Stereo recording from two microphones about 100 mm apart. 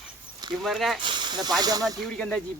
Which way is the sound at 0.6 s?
Centre (ahead or behind).